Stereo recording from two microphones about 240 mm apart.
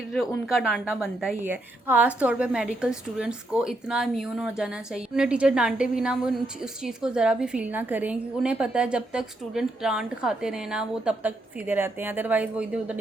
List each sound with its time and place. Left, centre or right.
0.4 s a woman's voice: centre